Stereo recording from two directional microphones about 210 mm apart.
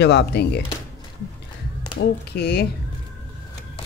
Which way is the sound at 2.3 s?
50° left (ahead or behind).